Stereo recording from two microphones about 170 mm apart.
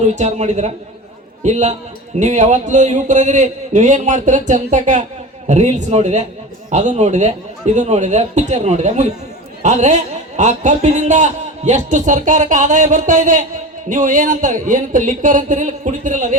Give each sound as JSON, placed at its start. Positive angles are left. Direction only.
{"t": 0.0, "sound": "a man's voice", "side_deg": -45}